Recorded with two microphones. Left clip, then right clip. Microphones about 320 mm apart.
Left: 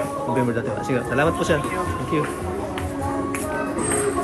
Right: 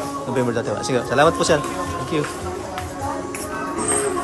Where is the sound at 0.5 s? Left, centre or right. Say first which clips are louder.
Right 2 dB; centre.